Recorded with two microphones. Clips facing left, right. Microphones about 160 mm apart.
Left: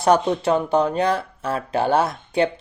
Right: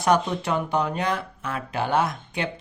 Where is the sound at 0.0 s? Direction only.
30° left (ahead or behind).